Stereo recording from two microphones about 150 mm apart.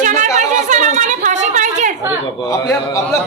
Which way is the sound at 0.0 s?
55° right (ahead or behind).